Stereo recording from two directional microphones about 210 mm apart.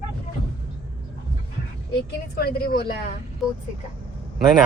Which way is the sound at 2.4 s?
45° left (ahead or behind).